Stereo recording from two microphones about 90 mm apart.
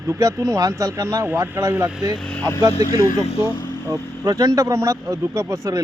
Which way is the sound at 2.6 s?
40° right (ahead or behind).